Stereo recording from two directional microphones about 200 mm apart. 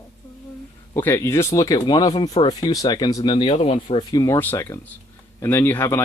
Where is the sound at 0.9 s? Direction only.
10° left (ahead or behind).